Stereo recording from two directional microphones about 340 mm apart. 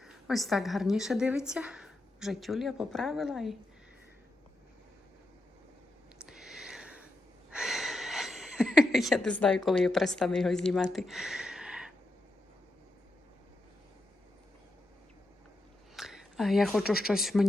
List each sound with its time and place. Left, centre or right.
0.0 s a woman's voice: centre
6.1 s a sound: centre
16.0 s speech: centre